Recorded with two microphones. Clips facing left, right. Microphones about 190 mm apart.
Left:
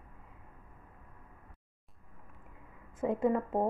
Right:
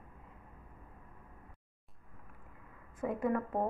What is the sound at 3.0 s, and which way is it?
Speech, 25° left (ahead or behind).